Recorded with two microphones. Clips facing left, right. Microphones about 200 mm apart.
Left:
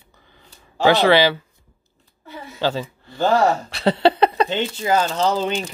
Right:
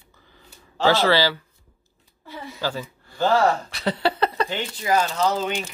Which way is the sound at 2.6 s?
25° left (ahead or behind).